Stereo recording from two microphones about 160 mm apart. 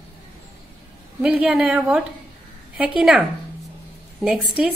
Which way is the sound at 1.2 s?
5° right (ahead or behind).